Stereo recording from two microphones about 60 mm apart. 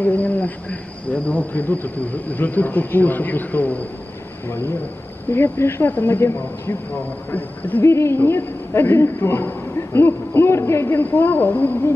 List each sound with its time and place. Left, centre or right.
0.0 s speech: left
4.5 s speech: left
7.8 s a man's voice: left